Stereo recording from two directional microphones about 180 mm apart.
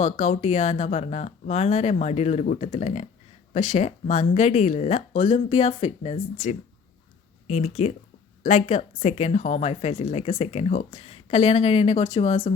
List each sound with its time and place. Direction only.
0.0 s a woman's voice: 40° left (ahead or behind)